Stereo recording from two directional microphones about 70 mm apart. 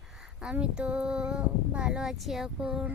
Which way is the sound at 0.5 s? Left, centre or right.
Centre.